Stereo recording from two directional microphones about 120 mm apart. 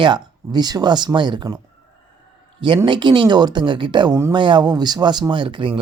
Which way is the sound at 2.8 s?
40° right (ahead or behind).